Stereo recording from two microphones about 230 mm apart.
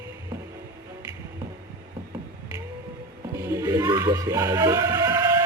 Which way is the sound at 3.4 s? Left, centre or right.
Centre.